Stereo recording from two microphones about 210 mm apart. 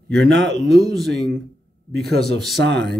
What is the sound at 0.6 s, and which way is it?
Speech, centre (ahead or behind).